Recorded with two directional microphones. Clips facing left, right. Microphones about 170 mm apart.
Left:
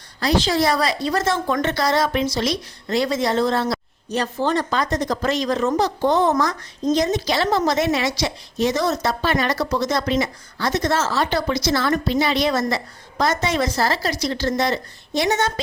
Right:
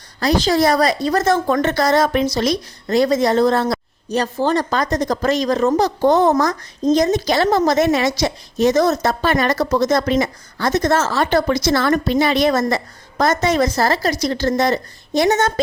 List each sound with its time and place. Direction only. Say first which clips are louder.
0.2 s speech: right 3 dB; 45° right (ahead or behind)